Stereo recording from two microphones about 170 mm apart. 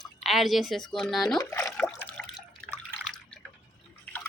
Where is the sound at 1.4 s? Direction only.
15° left (ahead or behind).